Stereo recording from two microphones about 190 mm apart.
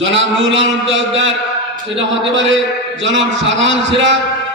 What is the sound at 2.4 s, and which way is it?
A man's voice, 75° right (ahead or behind).